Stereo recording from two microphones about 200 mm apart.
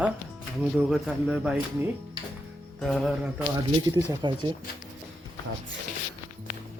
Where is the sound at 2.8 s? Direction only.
Centre (ahead or behind).